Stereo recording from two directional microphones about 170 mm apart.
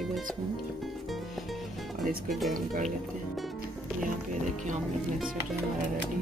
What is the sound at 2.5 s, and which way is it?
Speech, 50° right (ahead or behind).